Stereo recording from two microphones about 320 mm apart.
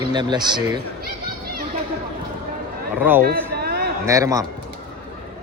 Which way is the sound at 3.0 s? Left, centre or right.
Centre.